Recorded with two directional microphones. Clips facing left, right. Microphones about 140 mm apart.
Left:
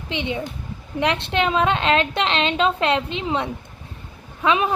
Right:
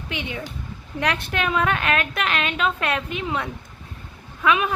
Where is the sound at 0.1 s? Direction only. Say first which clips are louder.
Left 5 dB; 25° left (ahead or behind).